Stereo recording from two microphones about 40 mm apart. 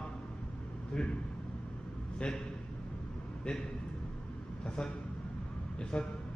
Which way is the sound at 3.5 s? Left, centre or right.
Left.